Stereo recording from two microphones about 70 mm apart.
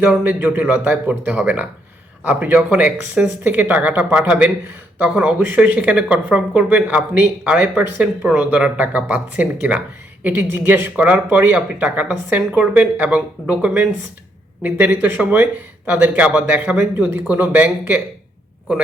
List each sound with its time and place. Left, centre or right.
0.0 s speech: right